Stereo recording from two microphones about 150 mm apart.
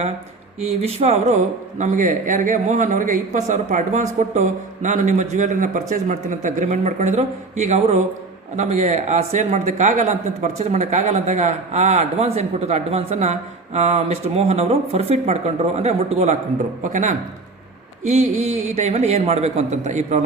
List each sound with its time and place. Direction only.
0.6 s a man's voice: 45° right (ahead or behind)